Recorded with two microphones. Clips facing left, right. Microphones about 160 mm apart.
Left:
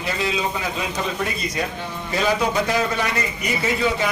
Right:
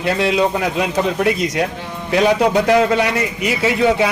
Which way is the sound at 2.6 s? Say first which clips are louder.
Right 8 dB; 70° right (ahead or behind).